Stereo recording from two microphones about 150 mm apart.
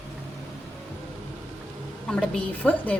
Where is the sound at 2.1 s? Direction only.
10° left (ahead or behind).